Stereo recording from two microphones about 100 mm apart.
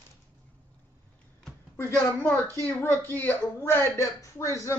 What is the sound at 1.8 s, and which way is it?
A woman's voice, 20° left (ahead or behind).